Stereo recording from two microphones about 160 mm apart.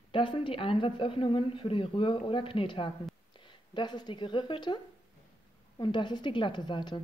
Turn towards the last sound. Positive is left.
turn(degrees=30)  # may be behind; listen again after turning